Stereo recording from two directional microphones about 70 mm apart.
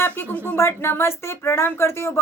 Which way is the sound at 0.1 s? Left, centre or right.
Left.